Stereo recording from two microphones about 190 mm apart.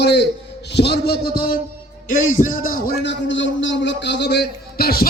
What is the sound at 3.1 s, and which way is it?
A man's voice, 75° left (ahead or behind).